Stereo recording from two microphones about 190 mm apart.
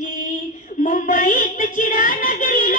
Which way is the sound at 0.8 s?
40° left (ahead or behind).